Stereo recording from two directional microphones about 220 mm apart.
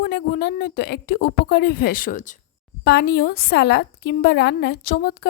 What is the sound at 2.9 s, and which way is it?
A woman's voice, 45° left (ahead or behind).